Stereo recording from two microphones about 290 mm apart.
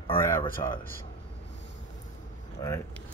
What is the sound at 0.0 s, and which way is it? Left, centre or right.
Speech, centre.